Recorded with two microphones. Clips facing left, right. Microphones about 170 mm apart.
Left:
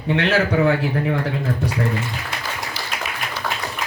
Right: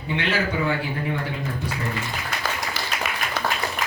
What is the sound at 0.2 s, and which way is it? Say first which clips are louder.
Speech: left 6 dB; 90° left.